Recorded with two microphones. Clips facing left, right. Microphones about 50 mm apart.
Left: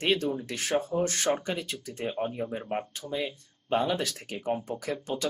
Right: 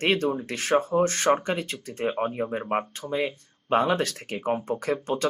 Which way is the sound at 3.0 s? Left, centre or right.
Right.